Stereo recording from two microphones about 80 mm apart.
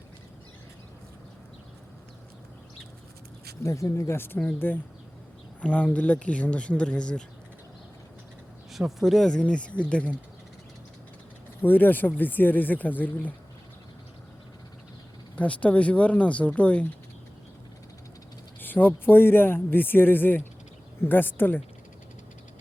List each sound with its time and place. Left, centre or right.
3.6 s speech: left; by 7.3 s centre
8.7 s speech: centre
11.6 s speech: left
15.4 s speech: centre
18.6 s speech: left